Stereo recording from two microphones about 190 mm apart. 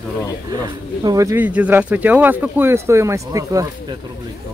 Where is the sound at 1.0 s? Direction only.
15° right (ahead or behind).